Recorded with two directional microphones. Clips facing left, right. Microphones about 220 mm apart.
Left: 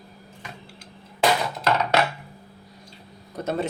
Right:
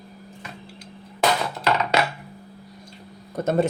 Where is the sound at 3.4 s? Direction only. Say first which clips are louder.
Right 4 dB; 50° right (ahead or behind).